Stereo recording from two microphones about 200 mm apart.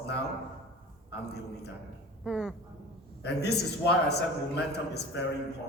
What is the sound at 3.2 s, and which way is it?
A man's voice, 55° left (ahead or behind).